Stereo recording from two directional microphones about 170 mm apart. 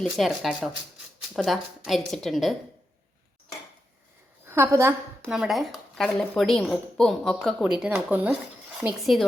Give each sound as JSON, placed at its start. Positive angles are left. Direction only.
{"t": 0.0, "sound": "speech", "side_deg": 0}
{"t": 4.4, "sound": "a woman's voice", "side_deg": -15}
{"t": 5.2, "sound": "speech", "side_deg": 0}